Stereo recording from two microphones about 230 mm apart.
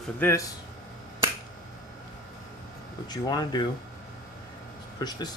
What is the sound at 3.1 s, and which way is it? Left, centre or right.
Speech, centre.